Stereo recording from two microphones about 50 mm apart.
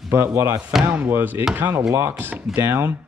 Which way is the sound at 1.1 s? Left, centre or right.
Right.